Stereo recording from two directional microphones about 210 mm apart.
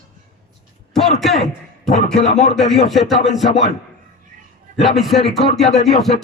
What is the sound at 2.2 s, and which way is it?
Speech, 35° left (ahead or behind).